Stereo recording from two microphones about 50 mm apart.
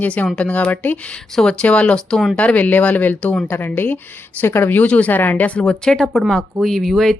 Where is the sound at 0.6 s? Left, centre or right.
Left.